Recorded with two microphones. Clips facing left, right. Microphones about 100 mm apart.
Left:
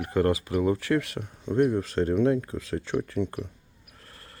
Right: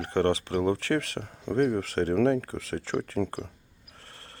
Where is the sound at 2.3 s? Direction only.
70° right (ahead or behind).